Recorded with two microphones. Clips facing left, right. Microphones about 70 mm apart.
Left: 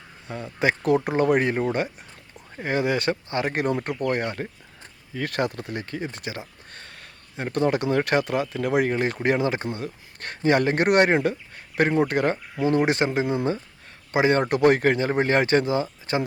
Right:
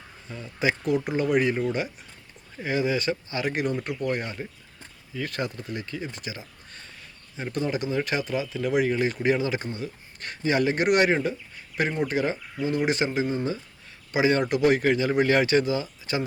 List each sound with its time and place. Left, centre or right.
0.3 s speech: left
12.7 s speech: left
13.2 s speech: left
14.1 s speech: left